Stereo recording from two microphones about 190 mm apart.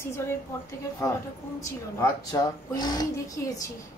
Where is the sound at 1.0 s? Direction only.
15° left (ahead or behind).